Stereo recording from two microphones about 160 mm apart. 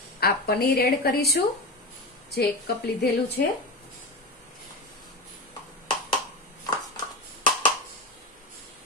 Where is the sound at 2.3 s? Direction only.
90° left.